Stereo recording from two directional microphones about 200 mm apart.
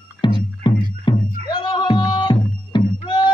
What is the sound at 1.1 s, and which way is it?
Music, 20° left (ahead or behind).